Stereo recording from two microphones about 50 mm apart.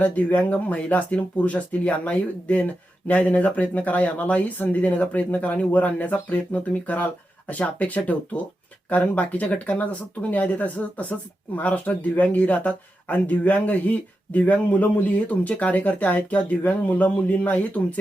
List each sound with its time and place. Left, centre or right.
0.0 s speech: left